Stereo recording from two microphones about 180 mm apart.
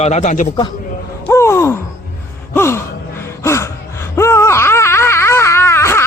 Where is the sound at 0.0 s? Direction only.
40° left (ahead or behind).